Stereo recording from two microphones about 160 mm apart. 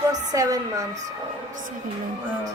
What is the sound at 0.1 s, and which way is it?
Speech, 20° right (ahead or behind).